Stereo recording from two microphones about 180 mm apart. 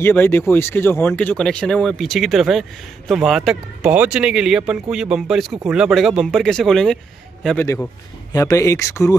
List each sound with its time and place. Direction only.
0.0 s speech: 10° left (ahead or behind)
7.6 s speech: 15° left (ahead or behind)